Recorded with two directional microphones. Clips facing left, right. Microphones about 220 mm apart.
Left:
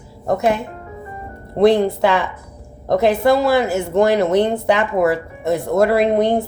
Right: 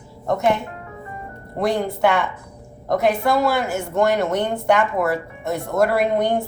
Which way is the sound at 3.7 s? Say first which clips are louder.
Left 4 dB; 35° left (ahead or behind).